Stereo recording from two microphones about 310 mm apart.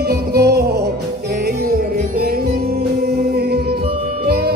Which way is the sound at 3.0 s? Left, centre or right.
Right.